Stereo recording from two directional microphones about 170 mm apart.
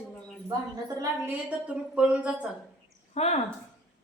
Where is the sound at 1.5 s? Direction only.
5° right (ahead or behind).